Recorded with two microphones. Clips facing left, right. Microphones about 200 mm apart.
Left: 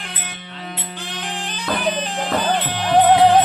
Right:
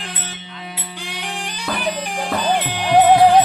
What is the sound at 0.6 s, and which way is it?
Music, 10° right (ahead or behind).